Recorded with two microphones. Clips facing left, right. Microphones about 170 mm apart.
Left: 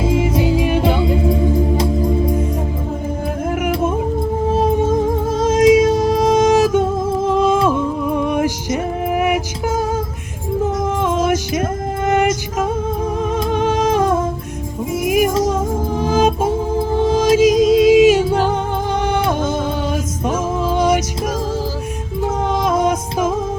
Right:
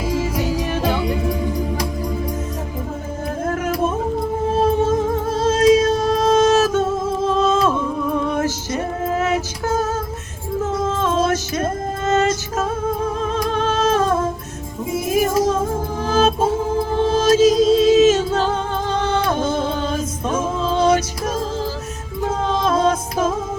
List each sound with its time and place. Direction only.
0.0 s music: 25° left (ahead or behind)
3.4 s music: 10° left (ahead or behind)
7.3 s humming: 15° left (ahead or behind)
7.7 s music: 15° left (ahead or behind)
13.4 s humming: 15° left (ahead or behind)
15.0 s music: 15° left (ahead or behind)
22.2 s music: 15° left (ahead or behind)